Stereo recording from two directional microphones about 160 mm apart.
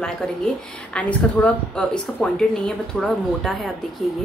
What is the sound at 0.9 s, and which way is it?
A woman's voice, 10° left (ahead or behind).